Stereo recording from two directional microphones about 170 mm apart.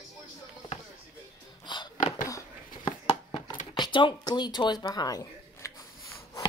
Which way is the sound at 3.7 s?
25° left (ahead or behind).